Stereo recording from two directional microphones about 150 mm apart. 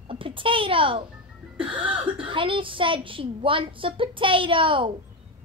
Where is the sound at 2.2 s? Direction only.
35° right (ahead or behind).